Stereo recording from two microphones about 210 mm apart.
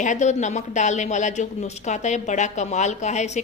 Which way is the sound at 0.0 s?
35° left (ahead or behind).